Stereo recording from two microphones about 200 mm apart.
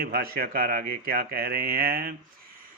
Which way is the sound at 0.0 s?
50° right (ahead or behind).